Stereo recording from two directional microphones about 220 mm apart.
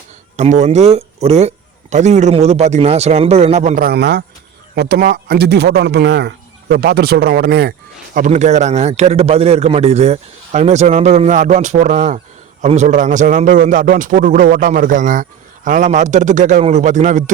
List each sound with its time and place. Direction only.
0.3 s speech: 30° right (ahead or behind)